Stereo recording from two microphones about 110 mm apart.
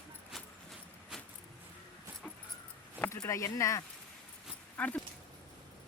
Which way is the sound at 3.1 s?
30° left (ahead or behind).